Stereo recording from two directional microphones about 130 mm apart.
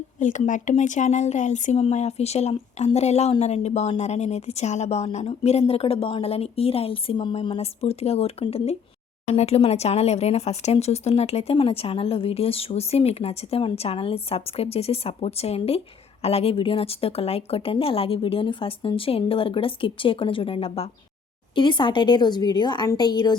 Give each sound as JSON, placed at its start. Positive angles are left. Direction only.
{"t": 0.2, "sound": "speech", "side_deg": 70}
{"t": 21.5, "sound": "speech", "side_deg": 40}